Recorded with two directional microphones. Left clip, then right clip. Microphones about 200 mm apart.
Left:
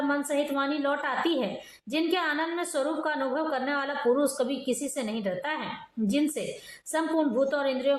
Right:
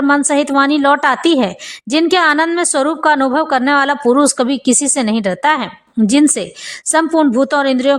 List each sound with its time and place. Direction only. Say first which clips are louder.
0.1 s a woman's voice: right 15 dB; 60° right (ahead or behind)